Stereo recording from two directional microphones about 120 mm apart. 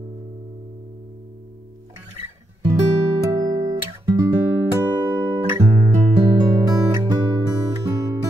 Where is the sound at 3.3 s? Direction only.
35° right (ahead or behind).